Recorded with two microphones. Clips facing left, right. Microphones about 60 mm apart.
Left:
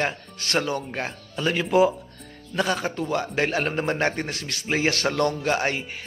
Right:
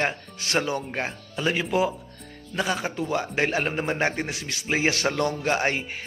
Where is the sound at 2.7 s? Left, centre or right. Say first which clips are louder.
Left 1 dB; centre.